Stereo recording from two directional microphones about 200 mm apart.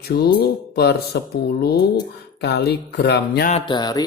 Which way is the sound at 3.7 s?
20° left (ahead or behind).